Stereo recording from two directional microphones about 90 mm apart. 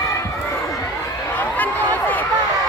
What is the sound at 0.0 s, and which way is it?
Crowd, 35° left (ahead or behind).